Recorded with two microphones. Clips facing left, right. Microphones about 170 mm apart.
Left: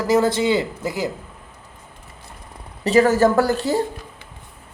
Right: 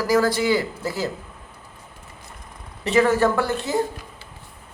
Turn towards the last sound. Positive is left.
turn(degrees=35)  # may be behind; listen again after turning